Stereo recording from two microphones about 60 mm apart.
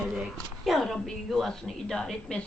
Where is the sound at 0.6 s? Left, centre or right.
Centre.